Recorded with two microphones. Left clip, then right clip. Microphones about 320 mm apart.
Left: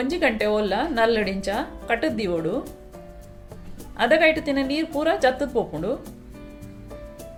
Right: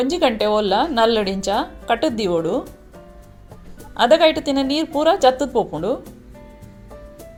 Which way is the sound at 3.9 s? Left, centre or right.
Centre.